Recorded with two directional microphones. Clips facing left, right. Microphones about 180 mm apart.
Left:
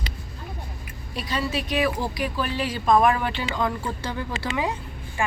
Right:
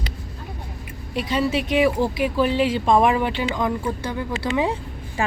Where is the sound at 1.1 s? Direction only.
25° right (ahead or behind).